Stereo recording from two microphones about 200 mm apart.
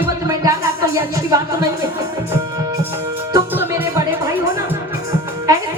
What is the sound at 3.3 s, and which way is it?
Music, 15° right (ahead or behind).